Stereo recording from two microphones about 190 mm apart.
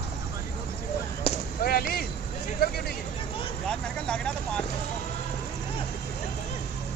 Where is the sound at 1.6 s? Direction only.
50° left (ahead or behind).